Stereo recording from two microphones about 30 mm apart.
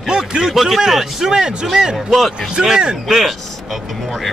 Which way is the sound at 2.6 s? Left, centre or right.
Right.